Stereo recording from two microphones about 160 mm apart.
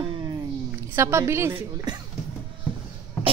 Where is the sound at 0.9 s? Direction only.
15° right (ahead or behind).